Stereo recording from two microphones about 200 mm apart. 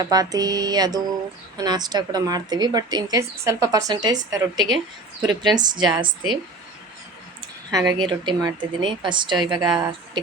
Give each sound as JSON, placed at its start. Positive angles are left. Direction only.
{"t": 0.0, "sound": "a woman's voice", "side_deg": -20}
{"t": 7.7, "sound": "speech", "side_deg": -20}